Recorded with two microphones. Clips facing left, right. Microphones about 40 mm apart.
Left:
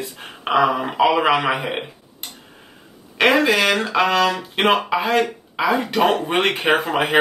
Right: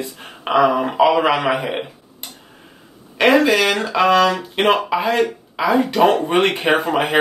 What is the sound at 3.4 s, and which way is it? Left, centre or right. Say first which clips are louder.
Speech: right 1 dB; centre.